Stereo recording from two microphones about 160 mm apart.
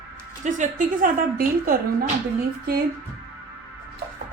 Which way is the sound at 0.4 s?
50° right (ahead or behind).